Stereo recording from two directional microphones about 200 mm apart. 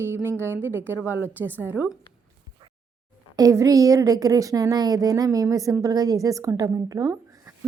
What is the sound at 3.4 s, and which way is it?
A woman's voice, 15° right (ahead or behind).